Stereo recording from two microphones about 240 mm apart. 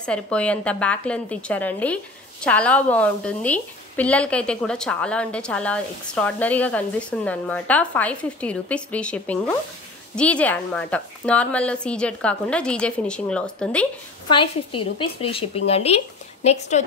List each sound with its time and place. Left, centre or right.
0.0 s a woman's voice: centre
14.3 s a woman's voice: left